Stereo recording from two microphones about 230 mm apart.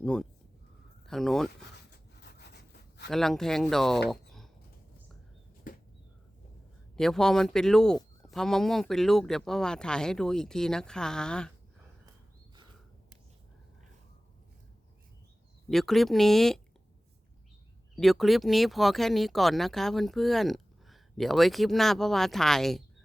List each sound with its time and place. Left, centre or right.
0.0 s speech: centre
3.1 s speech: centre
4.1 s a sound: centre
5.7 s a sound: left
6.9 s speech: centre
15.7 s speech: centre
17.9 s speech: centre